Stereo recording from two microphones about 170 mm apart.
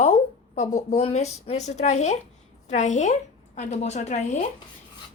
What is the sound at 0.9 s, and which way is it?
A woman's voice, 40° left (ahead or behind).